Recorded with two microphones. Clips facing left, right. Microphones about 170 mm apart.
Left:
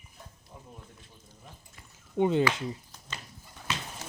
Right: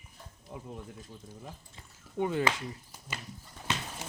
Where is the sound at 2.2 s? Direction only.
20° left (ahead or behind).